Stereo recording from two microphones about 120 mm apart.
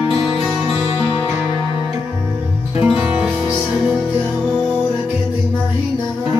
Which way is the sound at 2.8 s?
10° right (ahead or behind).